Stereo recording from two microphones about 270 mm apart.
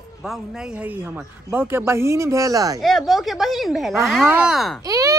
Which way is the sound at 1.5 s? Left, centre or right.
Centre.